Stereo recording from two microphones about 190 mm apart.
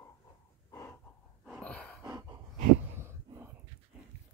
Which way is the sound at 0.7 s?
15° left (ahead or behind).